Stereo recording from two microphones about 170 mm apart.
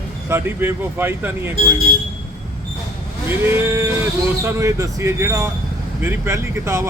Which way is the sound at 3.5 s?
15° right (ahead or behind).